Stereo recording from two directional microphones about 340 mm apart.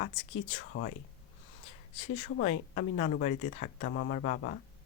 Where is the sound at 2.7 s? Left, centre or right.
Left.